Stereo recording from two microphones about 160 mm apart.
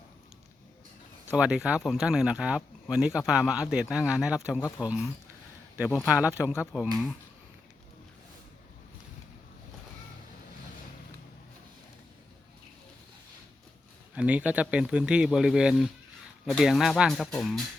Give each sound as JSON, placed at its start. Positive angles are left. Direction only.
{"t": 1.3, "sound": "speech", "side_deg": -5}
{"t": 6.1, "sound": "speech", "side_deg": -10}
{"t": 14.2, "sound": "speech", "side_deg": -10}